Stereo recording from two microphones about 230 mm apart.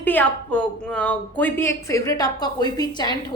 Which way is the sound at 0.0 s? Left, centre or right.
Centre.